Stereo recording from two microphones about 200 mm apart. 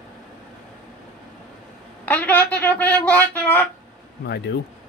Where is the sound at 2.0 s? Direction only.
10° left (ahead or behind).